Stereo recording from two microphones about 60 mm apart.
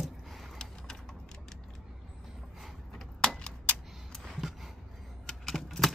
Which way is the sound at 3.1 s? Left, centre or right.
Centre.